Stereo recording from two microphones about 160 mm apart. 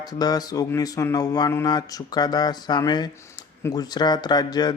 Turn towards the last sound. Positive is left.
turn(degrees=25)  # may be behind; listen again after turning